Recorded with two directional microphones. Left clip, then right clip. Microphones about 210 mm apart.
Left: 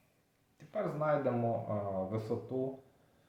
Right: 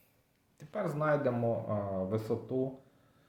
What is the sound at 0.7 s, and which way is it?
Speech, 45° right (ahead or behind).